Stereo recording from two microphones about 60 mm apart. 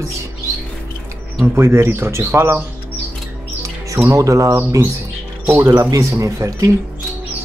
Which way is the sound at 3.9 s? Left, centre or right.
Right.